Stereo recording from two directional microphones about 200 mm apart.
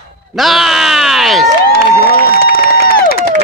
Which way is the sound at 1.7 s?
50° left (ahead or behind).